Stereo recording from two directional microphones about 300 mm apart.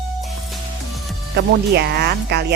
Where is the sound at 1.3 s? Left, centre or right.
Right.